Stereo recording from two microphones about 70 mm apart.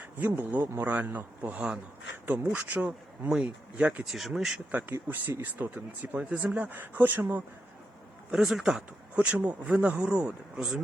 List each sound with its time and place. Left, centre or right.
0.2 s speech: right
4.0 s speech: centre
4.7 s speech: right
8.3 s speech: centre
9.1 s speech: right